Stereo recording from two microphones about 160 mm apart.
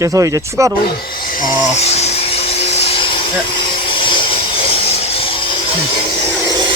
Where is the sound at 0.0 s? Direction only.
20° right (ahead or behind).